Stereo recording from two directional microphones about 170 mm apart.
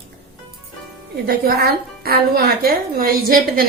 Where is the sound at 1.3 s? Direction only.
65° right (ahead or behind).